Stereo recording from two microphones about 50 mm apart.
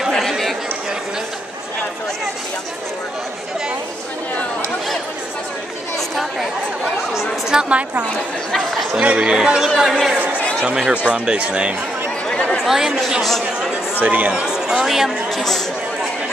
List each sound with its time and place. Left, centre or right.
0.2 s chatter: centre
7.2 s a woman's voice: centre
7.7 s speech: right
8.5 s speech: centre
9.0 s speech: right
9.8 s speech: centre
11.1 s speech: right
12.5 s a woman's voice: centre
14.0 s speech: right
14.3 s speech: centre